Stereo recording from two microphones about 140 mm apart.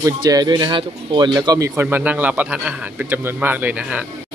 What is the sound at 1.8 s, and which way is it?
Speech, 10° right (ahead or behind).